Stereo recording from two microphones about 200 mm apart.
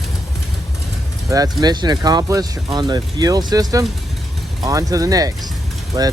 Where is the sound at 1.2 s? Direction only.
15° right (ahead or behind).